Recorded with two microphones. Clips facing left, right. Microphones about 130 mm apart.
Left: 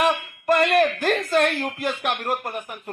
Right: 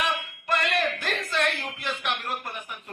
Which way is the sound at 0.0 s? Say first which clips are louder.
Left 8 dB; 50° left (ahead or behind).